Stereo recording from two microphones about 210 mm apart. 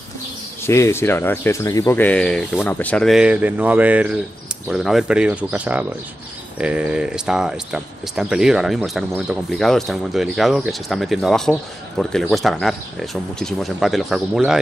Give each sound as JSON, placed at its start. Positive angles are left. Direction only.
{"t": 0.7, "sound": "speech", "side_deg": 10}